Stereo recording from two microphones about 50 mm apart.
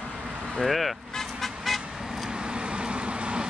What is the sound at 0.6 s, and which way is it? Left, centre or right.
Vehicle, centre.